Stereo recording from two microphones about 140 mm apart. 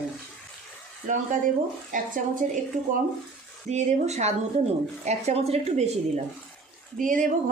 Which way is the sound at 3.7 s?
55° right (ahead or behind).